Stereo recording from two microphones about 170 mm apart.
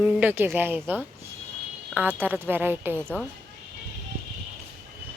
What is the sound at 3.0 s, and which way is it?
Speech, 5° left (ahead or behind).